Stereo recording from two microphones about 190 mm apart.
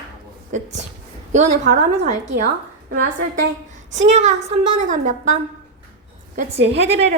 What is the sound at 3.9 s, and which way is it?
A woman's voice, 35° right (ahead or behind).